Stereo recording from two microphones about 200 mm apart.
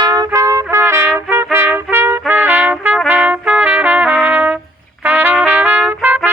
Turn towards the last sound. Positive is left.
turn(degrees=-10)  # may be behind; listen again after turning